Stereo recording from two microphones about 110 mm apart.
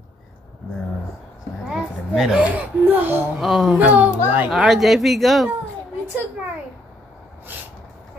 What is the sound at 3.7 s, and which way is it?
Speech, 15° right (ahead or behind).